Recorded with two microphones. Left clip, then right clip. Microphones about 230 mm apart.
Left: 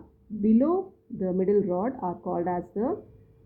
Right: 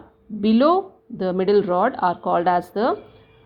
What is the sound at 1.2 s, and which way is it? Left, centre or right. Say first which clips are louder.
Speech: right 6 dB; centre.